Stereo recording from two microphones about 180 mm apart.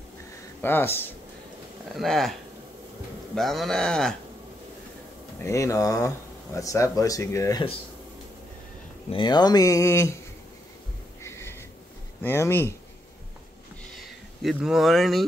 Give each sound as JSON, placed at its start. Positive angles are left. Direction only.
{"t": 0.6, "sound": "speech", "side_deg": 10}
{"t": 2.0, "sound": "speech", "side_deg": 0}
{"t": 3.3, "sound": "speech", "side_deg": 0}
{"t": 5.4, "sound": "speech", "side_deg": 15}
{"t": 9.1, "sound": "speech", "side_deg": 25}
{"t": 11.2, "sound": "a sound", "side_deg": 15}
{"t": 12.2, "sound": "speech", "side_deg": 15}
{"t": 14.4, "sound": "speech", "side_deg": 0}